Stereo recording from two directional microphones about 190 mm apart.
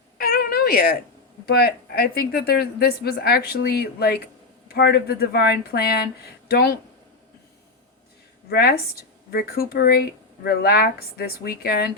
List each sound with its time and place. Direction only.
0.2 s cat: 50° left (ahead or behind)
1.5 s a woman's voice: 55° left (ahead or behind)
8.4 s a woman's voice: 55° left (ahead or behind)